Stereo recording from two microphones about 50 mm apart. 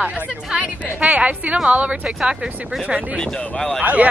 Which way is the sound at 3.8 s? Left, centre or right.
Right.